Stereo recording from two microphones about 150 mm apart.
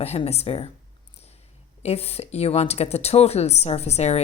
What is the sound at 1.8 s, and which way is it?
A woman's voice, 40° left (ahead or behind).